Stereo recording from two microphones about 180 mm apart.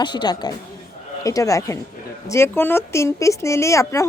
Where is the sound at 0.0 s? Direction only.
25° left (ahead or behind).